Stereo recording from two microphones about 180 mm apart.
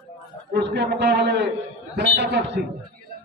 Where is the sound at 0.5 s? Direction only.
75° right (ahead or behind).